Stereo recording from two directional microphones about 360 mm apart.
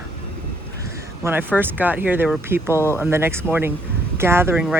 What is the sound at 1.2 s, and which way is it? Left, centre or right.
Speech, centre.